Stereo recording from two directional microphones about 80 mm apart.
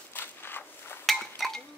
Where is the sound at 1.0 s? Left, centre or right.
Centre.